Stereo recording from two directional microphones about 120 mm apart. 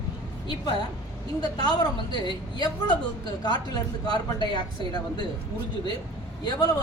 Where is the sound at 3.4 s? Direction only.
35° left (ahead or behind).